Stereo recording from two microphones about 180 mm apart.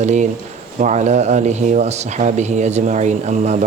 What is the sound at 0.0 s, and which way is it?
Speech, 40° right (ahead or behind).